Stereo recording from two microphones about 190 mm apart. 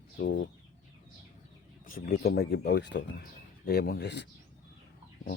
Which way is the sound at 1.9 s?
50° left (ahead or behind).